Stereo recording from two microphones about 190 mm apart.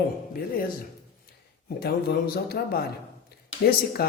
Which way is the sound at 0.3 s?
50° left (ahead or behind).